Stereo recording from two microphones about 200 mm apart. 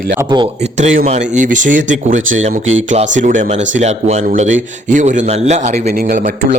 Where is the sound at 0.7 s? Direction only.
35° right (ahead or behind).